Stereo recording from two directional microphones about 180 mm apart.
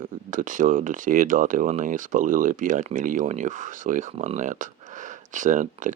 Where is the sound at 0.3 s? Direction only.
45° right (ahead or behind).